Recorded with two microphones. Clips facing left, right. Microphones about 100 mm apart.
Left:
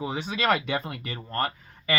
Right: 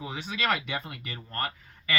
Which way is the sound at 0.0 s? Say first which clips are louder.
Left 5 dB; 25° left (ahead or behind).